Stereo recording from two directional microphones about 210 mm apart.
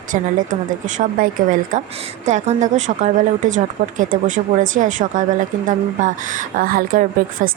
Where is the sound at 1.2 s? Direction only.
40° right (ahead or behind).